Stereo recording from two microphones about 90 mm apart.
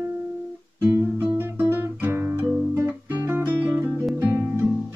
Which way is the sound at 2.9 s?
25° right (ahead or behind).